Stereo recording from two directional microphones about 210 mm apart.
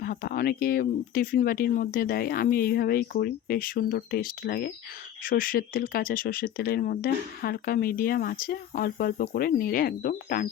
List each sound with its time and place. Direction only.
0.0 s speech: 45° left (ahead or behind)